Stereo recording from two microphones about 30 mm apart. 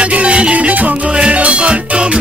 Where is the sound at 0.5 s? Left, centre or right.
Right.